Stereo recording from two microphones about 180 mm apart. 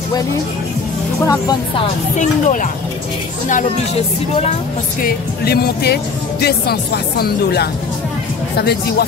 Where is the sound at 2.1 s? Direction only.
45° left (ahead or behind).